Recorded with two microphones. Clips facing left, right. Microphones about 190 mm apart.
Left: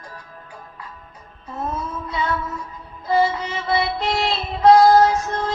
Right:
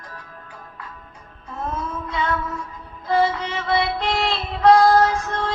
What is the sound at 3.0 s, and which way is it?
Music, 5° left (ahead or behind).